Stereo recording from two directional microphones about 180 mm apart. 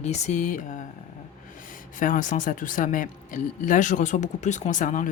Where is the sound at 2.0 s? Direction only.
45° left (ahead or behind).